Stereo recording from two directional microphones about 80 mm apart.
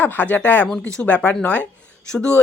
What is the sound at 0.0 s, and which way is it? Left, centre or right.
Speech, left.